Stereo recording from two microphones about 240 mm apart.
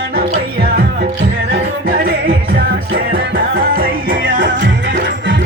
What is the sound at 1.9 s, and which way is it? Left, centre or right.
Music, right.